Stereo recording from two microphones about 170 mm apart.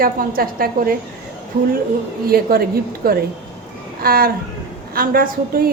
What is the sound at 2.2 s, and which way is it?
A woman's voice, 60° right (ahead or behind).